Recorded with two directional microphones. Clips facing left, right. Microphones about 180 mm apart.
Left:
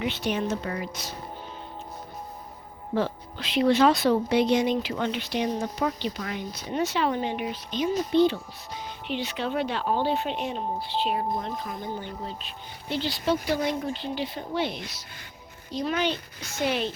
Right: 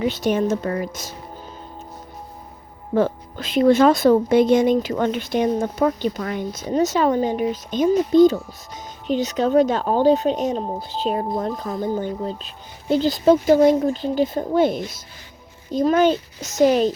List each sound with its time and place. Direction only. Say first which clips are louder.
0.0 s a woman's voice: right 7 dB; 40° right (ahead or behind)
2.9 s a woman's voice: right 7 dB; 50° right (ahead or behind)